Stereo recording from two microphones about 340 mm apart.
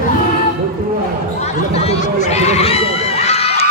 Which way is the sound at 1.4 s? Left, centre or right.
Centre.